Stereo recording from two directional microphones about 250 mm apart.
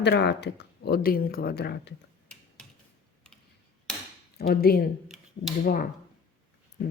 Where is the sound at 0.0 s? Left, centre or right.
Left.